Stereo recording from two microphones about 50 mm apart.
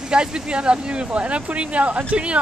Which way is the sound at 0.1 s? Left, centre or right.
Centre.